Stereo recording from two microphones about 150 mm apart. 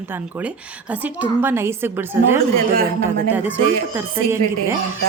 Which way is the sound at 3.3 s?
10° right (ahead or behind).